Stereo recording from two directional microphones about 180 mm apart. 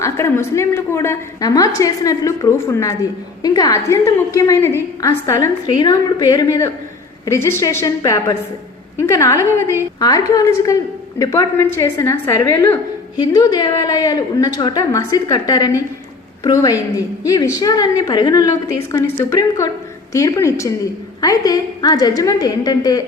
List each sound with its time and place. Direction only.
0.0 s a woman's voice: 15° left (ahead or behind)